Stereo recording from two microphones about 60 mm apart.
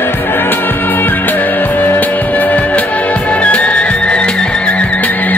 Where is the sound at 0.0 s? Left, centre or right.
Left.